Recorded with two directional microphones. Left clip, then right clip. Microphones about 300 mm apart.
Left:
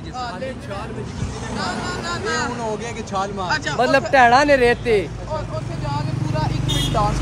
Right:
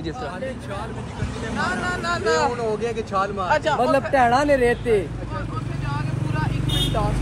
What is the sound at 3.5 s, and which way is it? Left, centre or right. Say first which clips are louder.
Speech: left 1 dB; centre.